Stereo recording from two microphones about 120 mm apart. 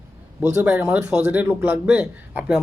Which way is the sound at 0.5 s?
20° right (ahead or behind).